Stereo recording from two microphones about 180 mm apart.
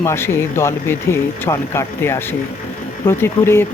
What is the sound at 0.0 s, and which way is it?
Speech, 15° left (ahead or behind).